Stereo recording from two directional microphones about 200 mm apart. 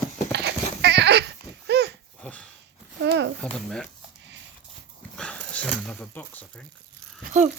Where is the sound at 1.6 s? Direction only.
55° right (ahead or behind).